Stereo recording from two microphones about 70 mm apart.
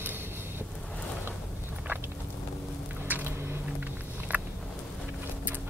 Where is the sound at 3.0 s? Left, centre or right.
Right.